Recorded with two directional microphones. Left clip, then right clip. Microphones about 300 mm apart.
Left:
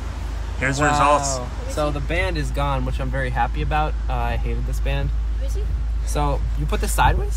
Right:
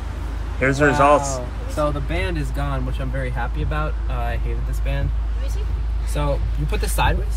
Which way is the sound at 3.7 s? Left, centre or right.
Left.